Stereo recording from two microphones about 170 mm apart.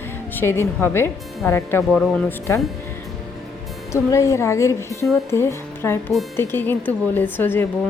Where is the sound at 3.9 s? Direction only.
15° left (ahead or behind).